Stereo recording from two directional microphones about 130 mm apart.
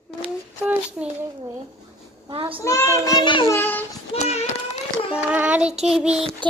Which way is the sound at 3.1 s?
35° left (ahead or behind).